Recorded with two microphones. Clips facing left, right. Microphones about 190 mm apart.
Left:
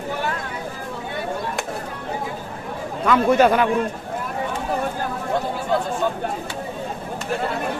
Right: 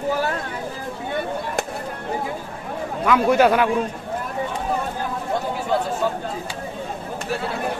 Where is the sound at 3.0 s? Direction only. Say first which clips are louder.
Even; 10° right (ahead or behind).